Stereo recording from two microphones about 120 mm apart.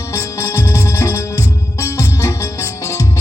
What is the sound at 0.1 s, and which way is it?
Music, 20° left (ahead or behind).